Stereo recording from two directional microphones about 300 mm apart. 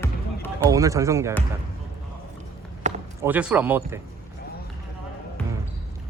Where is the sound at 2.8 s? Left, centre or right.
Right.